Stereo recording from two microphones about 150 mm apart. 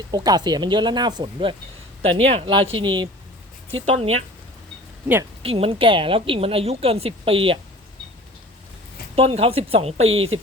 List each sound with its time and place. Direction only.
0.1 s a woman's voice: 25° right (ahead or behind)
3.8 s speech: 45° right (ahead or behind)
5.4 s a woman's voice: 40° right (ahead or behind)
9.1 s a woman's voice: 40° right (ahead or behind)